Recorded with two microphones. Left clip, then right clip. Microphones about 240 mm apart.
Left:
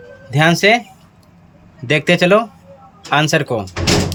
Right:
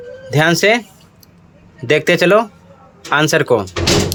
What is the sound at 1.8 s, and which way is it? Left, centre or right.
Speech, centre.